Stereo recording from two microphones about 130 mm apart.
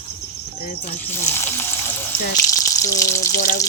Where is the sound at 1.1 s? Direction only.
20° left (ahead or behind).